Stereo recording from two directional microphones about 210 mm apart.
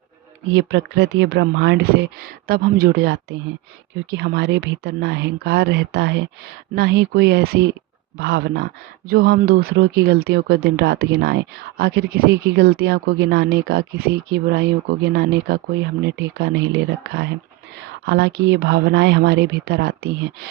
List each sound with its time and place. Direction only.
0.5 s speech: 55° right (ahead or behind)